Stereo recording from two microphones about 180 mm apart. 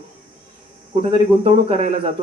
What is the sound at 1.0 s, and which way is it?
Speech, 30° right (ahead or behind).